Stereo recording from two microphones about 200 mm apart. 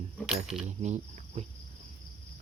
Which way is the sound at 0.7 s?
35° right (ahead or behind).